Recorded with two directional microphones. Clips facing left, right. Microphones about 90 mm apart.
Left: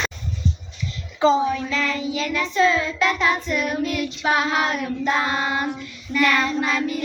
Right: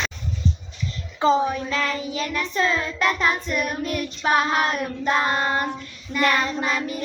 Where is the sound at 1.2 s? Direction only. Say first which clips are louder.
Left 1 dB; 45° right (ahead or behind).